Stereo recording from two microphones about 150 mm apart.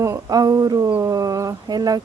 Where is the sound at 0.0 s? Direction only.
25° right (ahead or behind).